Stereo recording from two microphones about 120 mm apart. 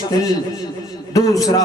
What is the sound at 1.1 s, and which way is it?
Speech, 30° left (ahead or behind).